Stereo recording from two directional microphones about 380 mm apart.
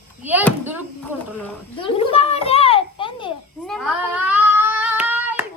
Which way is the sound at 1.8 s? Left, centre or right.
Centre.